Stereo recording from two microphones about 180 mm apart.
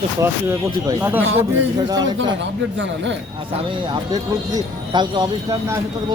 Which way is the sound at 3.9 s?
25° right (ahead or behind).